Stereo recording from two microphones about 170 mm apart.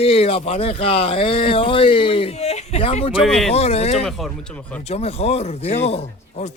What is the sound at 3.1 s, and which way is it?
Speech, 5° right (ahead or behind).